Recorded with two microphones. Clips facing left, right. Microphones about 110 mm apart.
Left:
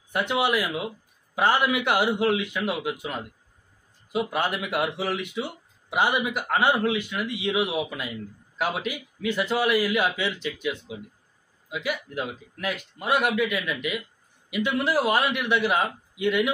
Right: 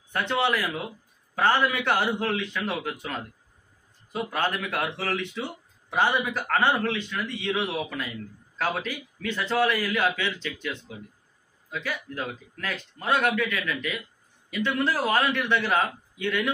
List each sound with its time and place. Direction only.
0.1 s speech: 10° left (ahead or behind)